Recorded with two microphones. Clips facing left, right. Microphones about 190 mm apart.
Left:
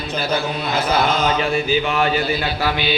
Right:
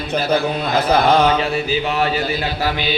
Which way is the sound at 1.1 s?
60° right (ahead or behind).